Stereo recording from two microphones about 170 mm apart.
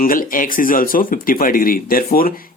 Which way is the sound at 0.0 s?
55° left (ahead or behind).